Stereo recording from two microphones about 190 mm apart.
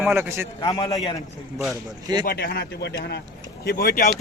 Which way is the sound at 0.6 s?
30° left (ahead or behind).